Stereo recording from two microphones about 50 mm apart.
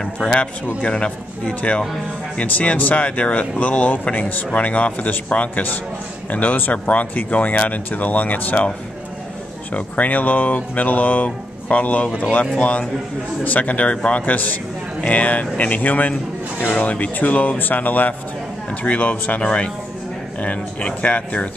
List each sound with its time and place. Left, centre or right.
0.0 s a man's voice: centre; by 8.6 s left
9.8 s a man's voice: left